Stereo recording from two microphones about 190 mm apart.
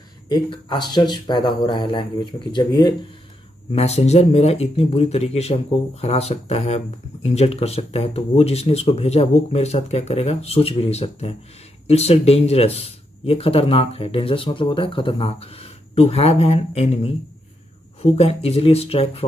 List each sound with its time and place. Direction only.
0.3 s speech: 20° left (ahead or behind)
3.7 s speech: 35° left (ahead or behind)
18.1 s speech: 30° left (ahead or behind)